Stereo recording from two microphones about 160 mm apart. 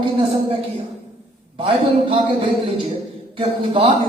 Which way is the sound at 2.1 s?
35° right (ahead or behind).